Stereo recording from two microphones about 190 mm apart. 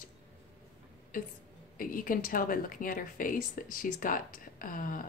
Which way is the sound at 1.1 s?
45° left (ahead or behind).